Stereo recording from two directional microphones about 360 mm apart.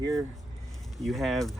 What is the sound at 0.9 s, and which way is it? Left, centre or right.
Speech, centre.